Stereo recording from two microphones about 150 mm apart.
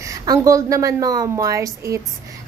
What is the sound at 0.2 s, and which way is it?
A woman's voice, 20° right (ahead or behind).